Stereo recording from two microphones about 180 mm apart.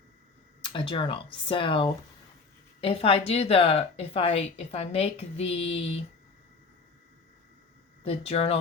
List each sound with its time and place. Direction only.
0.6 s speech: 30° left (ahead or behind)
8.0 s speech: 35° left (ahead or behind)